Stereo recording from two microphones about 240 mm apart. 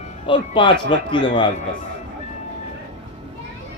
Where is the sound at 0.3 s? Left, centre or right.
Left.